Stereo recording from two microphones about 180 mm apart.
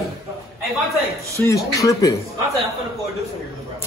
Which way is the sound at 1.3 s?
15° left (ahead or behind).